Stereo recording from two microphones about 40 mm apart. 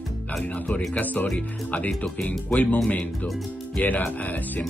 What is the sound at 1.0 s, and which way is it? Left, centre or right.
Speech, left.